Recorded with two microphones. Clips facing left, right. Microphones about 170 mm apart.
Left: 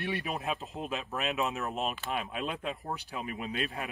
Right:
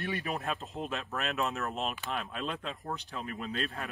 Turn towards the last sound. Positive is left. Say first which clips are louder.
# left 1 dB
turn(degrees=15)  # may be behind; listen again after turning